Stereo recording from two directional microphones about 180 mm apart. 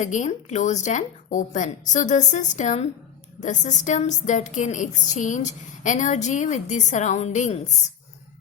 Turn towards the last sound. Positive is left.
turn(degrees=40)  # may be behind; listen again after turning